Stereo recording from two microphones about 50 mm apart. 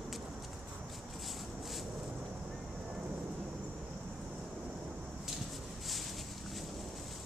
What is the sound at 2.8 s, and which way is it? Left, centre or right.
Vehicle, right.